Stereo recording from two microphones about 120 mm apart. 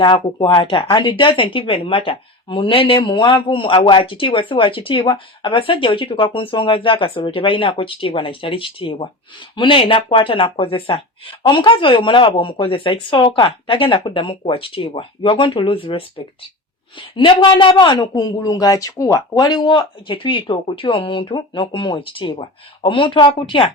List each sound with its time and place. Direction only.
0.0 s speech: 45° left (ahead or behind)